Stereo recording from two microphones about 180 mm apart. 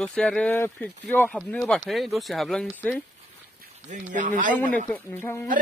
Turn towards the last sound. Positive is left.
turn(degrees=10)  # may be behind; listen again after turning